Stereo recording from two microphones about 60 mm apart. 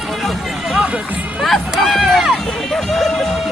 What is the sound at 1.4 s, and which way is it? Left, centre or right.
Speech, centre.